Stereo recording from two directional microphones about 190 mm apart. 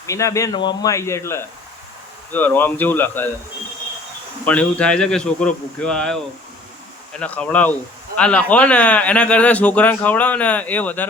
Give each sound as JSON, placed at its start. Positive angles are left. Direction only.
{"t": 0.0, "sound": "speech", "side_deg": 15}
{"t": 4.4, "sound": "speech", "side_deg": 5}
{"t": 7.2, "sound": "speech", "side_deg": 5}